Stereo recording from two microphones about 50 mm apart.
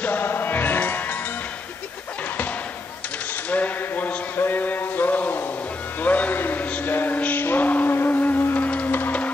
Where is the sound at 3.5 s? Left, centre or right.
Left.